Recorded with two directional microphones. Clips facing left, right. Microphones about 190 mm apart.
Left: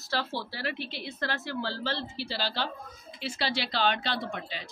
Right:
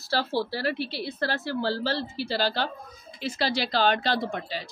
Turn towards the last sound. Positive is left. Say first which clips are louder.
# right 5 dB
turn(degrees=-40)  # may be behind; listen again after turning